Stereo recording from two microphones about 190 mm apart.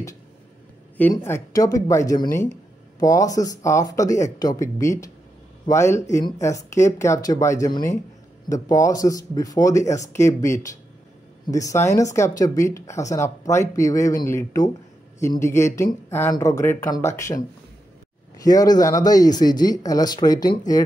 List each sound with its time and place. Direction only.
1.1 s speech: 15° left (ahead or behind)
18.4 s speech: 20° left (ahead or behind)